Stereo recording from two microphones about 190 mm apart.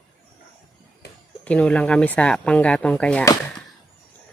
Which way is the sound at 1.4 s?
5° left (ahead or behind).